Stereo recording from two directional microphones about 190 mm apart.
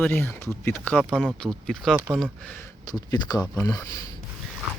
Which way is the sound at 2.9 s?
20° left (ahead or behind).